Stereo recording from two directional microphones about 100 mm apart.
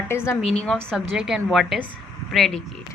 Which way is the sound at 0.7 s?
5° left (ahead or behind).